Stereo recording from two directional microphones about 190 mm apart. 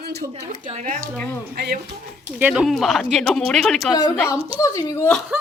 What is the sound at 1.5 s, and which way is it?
Speech, 60° right (ahead or behind).